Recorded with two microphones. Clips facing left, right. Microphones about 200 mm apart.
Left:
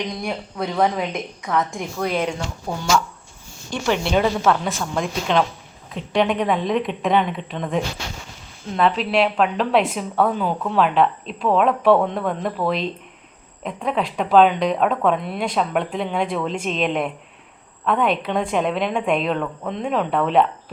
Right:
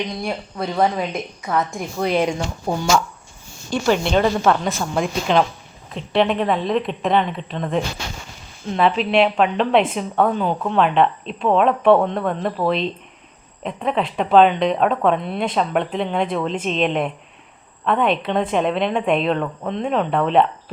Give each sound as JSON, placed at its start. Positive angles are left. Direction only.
{"t": 0.3, "sound": "a woman's voice", "side_deg": 0}
{"t": 2.7, "sound": "speech", "side_deg": -40}
{"t": 4.0, "sound": "a woman's voice", "side_deg": 5}
{"t": 8.7, "sound": "a woman's voice", "side_deg": 0}